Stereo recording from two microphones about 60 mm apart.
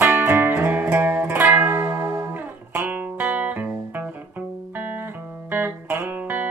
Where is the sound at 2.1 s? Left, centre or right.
Right.